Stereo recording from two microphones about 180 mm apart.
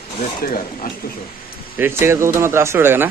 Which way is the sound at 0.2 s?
50° left (ahead or behind).